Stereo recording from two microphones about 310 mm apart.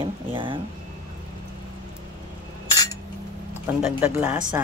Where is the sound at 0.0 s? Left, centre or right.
Centre.